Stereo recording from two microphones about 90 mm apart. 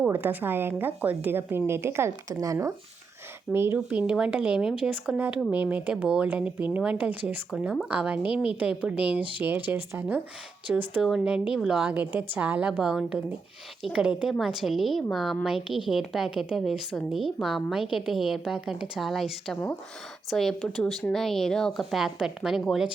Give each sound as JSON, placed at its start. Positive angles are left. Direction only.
{"t": 0.1, "sound": "a woman's voice", "side_deg": -20}
{"t": 3.5, "sound": "a woman's voice", "side_deg": -25}
{"t": 3.8, "sound": "a woman's voice", "side_deg": -10}
{"t": 11.0, "sound": "a woman's voice", "side_deg": -5}